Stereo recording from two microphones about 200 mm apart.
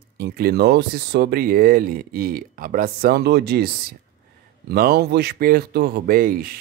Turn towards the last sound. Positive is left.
turn(degrees=-45)  # may be behind; listen again after turning